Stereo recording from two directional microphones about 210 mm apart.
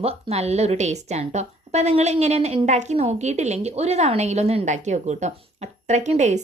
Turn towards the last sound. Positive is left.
turn(degrees=-35)  # may be behind; listen again after turning